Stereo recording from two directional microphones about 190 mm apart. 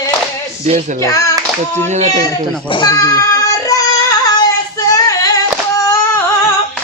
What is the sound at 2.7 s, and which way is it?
Child singing, 20° left (ahead or behind).